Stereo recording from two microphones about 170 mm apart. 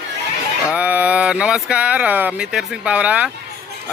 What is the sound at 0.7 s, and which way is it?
A man's voice, 10° right (ahead or behind).